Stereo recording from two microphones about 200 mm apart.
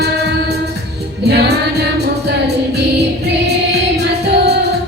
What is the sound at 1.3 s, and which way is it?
Music, 55° right (ahead or behind).